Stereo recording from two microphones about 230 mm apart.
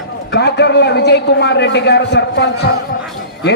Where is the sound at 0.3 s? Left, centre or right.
Left.